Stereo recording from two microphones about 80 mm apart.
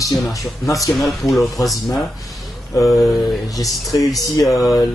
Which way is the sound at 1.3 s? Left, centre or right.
Centre.